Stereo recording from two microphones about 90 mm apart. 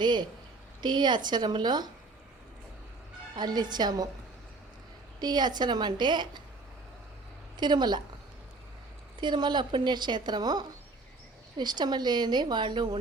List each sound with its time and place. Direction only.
0.0 s a woman's voice: 55° right (ahead or behind)
3.3 s speech: 50° right (ahead or behind)
5.2 s a woman's voice: 50° right (ahead or behind)
7.6 s a woman's voice: 55° right (ahead or behind)
9.2 s a woman's voice: 55° right (ahead or behind)